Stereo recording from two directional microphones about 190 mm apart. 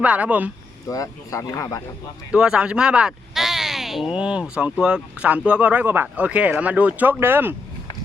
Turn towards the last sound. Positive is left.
turn(degrees=-10)  # may be behind; listen again after turning